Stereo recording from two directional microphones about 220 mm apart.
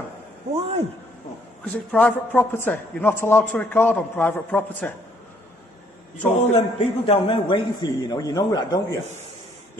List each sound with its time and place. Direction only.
0.6 s a man's voice: 30° right (ahead or behind)
1.6 s a man's voice: 5° left (ahead or behind)
6.5 s a man's voice: 25° left (ahead or behind)